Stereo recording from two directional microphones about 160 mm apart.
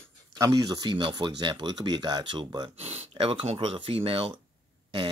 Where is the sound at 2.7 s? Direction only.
40° right (ahead or behind).